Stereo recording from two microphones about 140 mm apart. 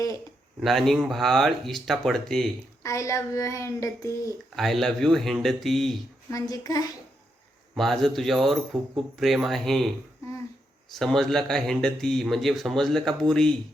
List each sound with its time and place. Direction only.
0.6 s speech: centre (ahead or behind)
2.8 s child singing: 20° left (ahead or behind)
4.5 s speech: centre (ahead or behind)
6.3 s child singing: 25° left (ahead or behind)
7.8 s speech: centre (ahead or behind)
10.9 s speech: centre (ahead or behind)